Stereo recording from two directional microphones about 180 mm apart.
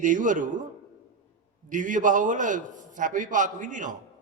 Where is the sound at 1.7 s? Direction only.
45° right (ahead or behind).